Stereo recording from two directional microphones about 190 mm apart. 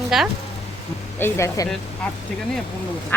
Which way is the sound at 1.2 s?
15° left (ahead or behind).